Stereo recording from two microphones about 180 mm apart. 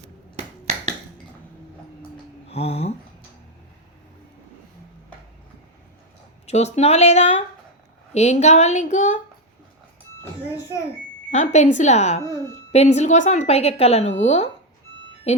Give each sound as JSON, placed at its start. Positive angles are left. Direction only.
{"t": 2.5, "sound": "a sound", "side_deg": 35}
{"t": 6.4, "sound": "a woman's voice", "side_deg": 40}
{"t": 11.3, "sound": "a woman's voice", "side_deg": 40}